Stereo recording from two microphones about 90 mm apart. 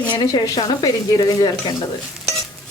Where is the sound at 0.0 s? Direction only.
55° left (ahead or behind).